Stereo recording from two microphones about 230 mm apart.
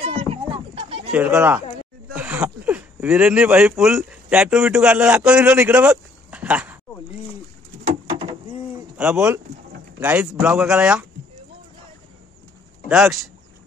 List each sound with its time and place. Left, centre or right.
0.0 s a sound: right
1.1 s speech: centre
7.8 s bird: right
8.9 s speech: centre
12.8 s speech: centre